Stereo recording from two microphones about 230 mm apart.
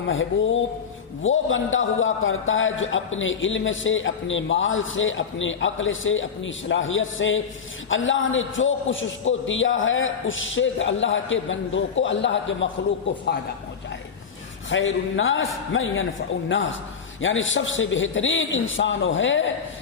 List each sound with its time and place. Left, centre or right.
0.1 s a man's voice: left
14.7 s a man's voice: left